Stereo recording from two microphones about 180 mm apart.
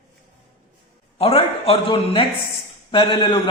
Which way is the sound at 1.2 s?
30° left (ahead or behind).